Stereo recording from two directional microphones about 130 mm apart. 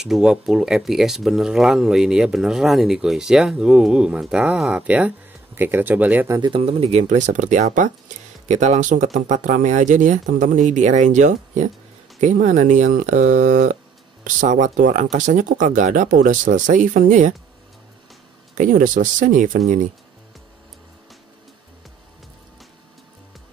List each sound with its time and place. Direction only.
0.0 s speech: 5° right (ahead or behind)
6.2 s speech: 25° right (ahead or behind)
6.5 s speech: 50° right (ahead or behind); by 17.3 s 80° right
18.6 s speech: 90° right